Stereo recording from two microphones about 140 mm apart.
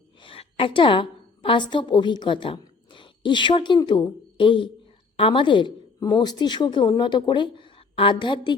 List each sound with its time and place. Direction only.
0.2 s a woman's voice: 40° left (ahead or behind)